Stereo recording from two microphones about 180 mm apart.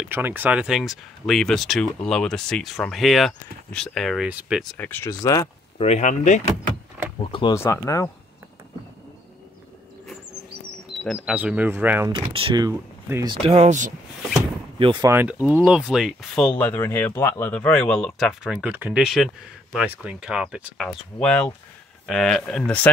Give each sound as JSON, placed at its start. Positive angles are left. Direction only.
{"t": 0.0, "sound": "speech", "side_deg": -10}
{"t": 4.7, "sound": "speech", "side_deg": 10}
{"t": 5.8, "sound": "speech", "side_deg": 40}
{"t": 7.5, "sound": "speech", "side_deg": 15}
{"t": 11.1, "sound": "speech", "side_deg": -5}
{"t": 12.1, "sound": "speech", "side_deg": -25}
{"t": 14.8, "sound": "speech", "side_deg": -30}
{"t": 15.0, "sound": "speech", "side_deg": -10}